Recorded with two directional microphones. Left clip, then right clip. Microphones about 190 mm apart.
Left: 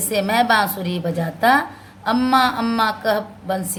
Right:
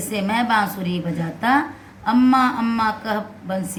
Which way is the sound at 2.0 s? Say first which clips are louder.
Even; 45° left (ahead or behind).